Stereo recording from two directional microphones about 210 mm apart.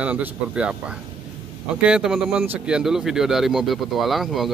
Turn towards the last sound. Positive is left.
turn(degrees=0)  # may be behind; listen again after turning